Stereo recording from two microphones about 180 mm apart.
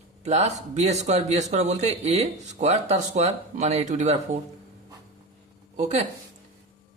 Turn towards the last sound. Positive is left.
turn(degrees=-40)  # may be behind; listen again after turning